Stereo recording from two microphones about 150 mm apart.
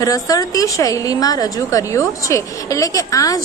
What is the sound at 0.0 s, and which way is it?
A woman's voice, 25° left (ahead or behind).